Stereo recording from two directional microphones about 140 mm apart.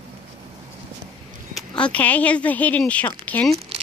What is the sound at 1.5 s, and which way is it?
A woman's voice, 5° left (ahead or behind).